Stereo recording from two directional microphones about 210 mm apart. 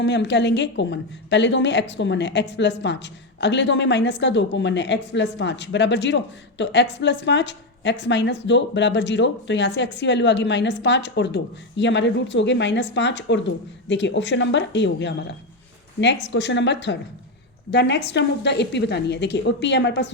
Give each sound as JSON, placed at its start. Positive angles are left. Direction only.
{"t": 0.0, "sound": "a woman's voice", "side_deg": 55}